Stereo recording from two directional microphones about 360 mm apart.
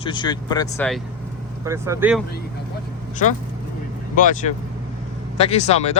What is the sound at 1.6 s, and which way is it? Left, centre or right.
Speech, centre.